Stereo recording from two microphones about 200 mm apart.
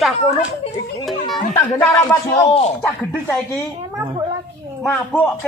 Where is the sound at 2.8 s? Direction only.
10° left (ahead or behind).